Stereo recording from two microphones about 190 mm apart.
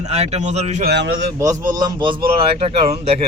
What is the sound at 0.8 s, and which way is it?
Speech, 60° right (ahead or behind).